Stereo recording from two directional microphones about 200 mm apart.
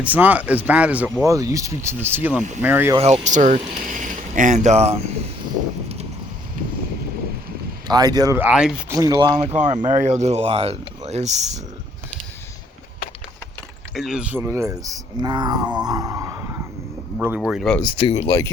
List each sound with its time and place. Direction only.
0.0 s speech: 10° right (ahead or behind)
3.0 s speech: 35° right (ahead or behind)
7.9 s speech: 20° right (ahead or behind)
9.0 s speech: 20° right (ahead or behind)
9.8 s speech: 35° right (ahead or behind)
13.9 s a man's voice: centre (ahead or behind)
17.7 s speech: 25° left (ahead or behind)
18.3 s speech: 15° left (ahead or behind)